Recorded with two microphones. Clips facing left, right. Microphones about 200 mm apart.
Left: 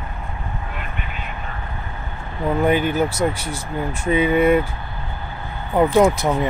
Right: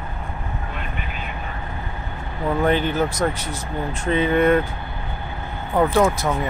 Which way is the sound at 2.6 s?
10° left (ahead or behind).